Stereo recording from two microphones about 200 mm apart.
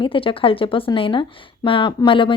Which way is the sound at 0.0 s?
25° left (ahead or behind).